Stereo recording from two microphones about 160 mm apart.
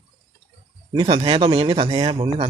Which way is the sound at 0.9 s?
35° right (ahead or behind).